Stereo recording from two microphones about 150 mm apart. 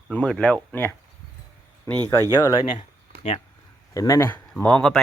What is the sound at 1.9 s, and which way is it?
Speech, 20° left (ahead or behind).